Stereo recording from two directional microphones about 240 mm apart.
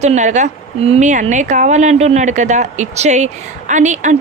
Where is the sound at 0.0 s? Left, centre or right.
Right.